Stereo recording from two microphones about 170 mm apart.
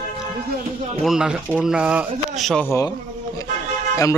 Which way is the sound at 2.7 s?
20° left (ahead or behind).